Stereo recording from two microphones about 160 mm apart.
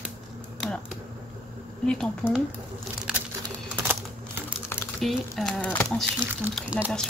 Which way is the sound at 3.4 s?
20° right (ahead or behind).